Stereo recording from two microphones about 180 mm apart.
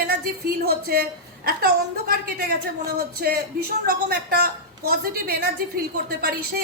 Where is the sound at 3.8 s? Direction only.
60° right (ahead or behind).